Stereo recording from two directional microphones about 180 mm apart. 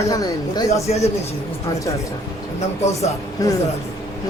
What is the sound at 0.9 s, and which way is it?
Speech, 35° left (ahead or behind).